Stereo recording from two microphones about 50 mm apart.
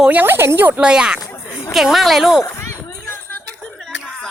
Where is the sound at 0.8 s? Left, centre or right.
Centre.